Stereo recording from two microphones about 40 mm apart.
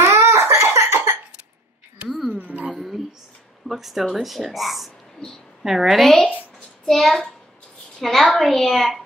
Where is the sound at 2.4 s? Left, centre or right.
Right.